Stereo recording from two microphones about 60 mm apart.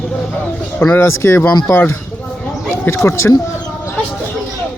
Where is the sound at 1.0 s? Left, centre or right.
Left.